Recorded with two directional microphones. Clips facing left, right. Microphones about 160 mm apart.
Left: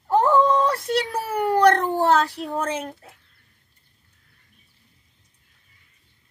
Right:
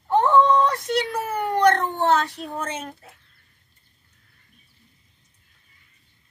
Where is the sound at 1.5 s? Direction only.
35° left (ahead or behind).